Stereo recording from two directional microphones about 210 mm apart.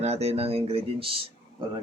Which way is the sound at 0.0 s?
30° right (ahead or behind).